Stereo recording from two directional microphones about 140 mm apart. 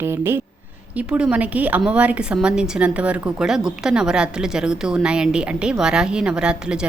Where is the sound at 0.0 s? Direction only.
15° right (ahead or behind).